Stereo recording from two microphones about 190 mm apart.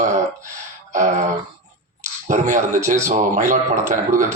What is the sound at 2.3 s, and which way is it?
Speech, 40° right (ahead or behind).